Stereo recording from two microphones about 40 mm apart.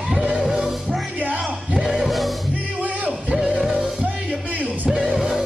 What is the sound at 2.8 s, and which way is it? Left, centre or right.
Music, right.